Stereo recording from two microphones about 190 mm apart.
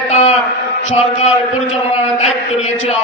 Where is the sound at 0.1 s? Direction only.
35° left (ahead or behind).